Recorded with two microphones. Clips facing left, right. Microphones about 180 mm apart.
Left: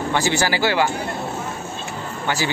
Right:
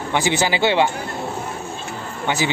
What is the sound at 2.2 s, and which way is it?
Speech, 20° right (ahead or behind).